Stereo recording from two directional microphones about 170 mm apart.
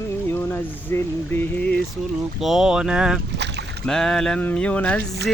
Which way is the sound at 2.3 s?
Centre (ahead or behind).